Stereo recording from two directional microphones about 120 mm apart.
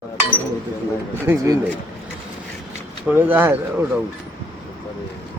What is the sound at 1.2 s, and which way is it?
Speech, 25° right (ahead or behind).